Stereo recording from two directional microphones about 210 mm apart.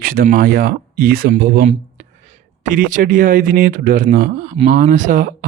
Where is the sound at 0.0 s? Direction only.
40° right (ahead or behind).